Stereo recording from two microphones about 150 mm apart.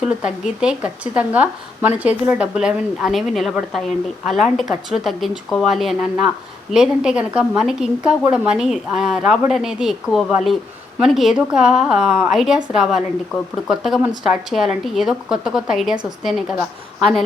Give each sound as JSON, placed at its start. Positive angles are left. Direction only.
{"t": 0.6, "sound": "speech", "side_deg": -10}